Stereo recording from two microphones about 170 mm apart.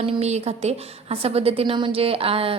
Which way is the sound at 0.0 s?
35° right (ahead or behind).